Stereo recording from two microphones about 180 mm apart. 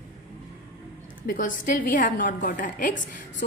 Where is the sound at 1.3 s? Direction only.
50° left (ahead or behind).